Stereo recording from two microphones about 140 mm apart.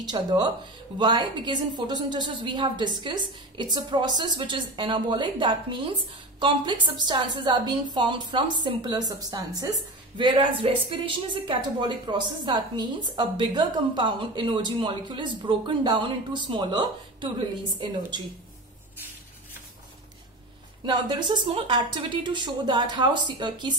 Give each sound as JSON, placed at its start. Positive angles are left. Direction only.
{"t": 0.0, "sound": "a woman's voice", "side_deg": -30}
{"t": 20.8, "sound": "a woman's voice", "side_deg": -30}